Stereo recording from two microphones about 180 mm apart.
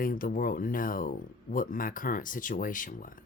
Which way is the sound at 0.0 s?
50° left (ahead or behind).